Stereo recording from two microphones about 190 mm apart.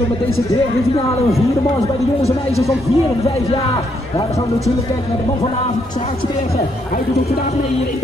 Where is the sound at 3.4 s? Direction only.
30° left (ahead or behind).